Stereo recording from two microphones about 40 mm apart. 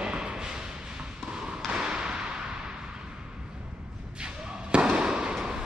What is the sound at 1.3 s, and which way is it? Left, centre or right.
Basketball bounce, right.